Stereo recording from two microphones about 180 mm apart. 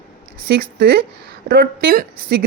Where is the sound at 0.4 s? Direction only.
60° right (ahead or behind).